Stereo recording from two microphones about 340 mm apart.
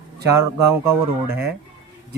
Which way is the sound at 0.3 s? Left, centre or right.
Centre.